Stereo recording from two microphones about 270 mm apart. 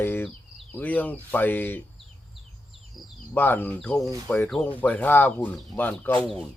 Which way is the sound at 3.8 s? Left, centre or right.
Centre.